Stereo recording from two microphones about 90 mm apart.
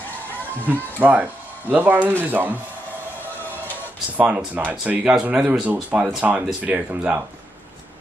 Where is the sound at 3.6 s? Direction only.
20° right (ahead or behind).